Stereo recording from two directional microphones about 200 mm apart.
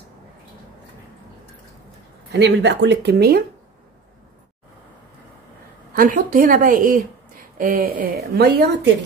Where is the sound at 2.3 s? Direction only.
60° right (ahead or behind).